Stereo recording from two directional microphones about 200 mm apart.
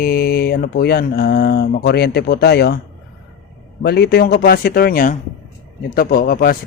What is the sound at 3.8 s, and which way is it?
Speech, 55° left (ahead or behind).